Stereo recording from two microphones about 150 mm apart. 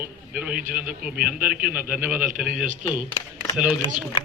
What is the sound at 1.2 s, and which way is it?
Speech, 80° right.